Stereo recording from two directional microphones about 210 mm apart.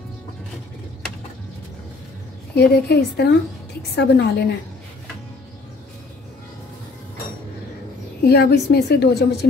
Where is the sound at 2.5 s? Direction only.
50° left (ahead or behind).